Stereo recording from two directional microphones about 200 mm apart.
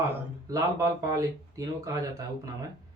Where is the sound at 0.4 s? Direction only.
15° right (ahead or behind).